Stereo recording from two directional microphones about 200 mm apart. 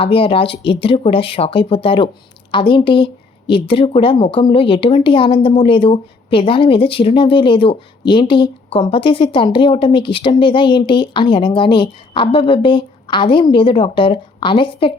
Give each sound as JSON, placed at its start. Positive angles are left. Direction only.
{"t": 0.0, "sound": "speech", "side_deg": 25}